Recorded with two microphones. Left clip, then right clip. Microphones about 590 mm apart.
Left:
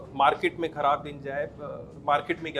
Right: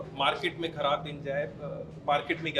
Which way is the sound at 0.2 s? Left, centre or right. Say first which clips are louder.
Left 6 dB; left.